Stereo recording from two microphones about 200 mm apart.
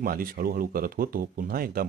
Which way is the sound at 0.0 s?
45° right (ahead or behind).